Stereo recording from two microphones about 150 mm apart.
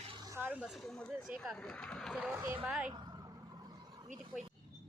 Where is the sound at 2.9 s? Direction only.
30° right (ahead or behind).